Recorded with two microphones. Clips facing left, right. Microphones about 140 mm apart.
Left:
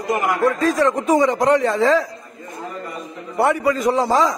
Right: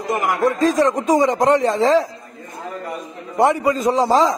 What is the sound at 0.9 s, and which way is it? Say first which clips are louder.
Speech: even; 15° right (ahead or behind).